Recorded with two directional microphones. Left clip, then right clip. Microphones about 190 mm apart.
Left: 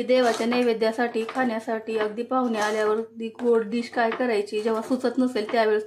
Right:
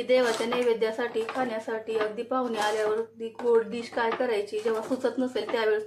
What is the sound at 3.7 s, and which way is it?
Speech, 35° left (ahead or behind).